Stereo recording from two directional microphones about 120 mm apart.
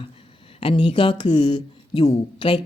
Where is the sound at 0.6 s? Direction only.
50° left (ahead or behind).